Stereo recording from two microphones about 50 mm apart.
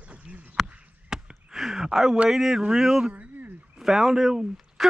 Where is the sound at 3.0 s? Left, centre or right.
Right.